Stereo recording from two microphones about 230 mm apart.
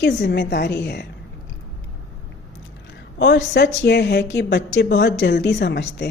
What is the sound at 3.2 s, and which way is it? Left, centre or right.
Speech, left.